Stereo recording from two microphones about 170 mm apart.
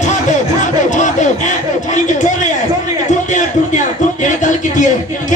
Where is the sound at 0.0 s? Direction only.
45° left (ahead or behind).